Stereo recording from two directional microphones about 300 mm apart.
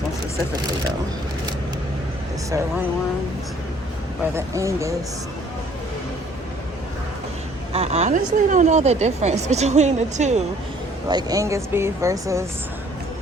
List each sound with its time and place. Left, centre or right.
4.4 s speech: centre
7.7 s a woman's voice: right
11.1 s speech: centre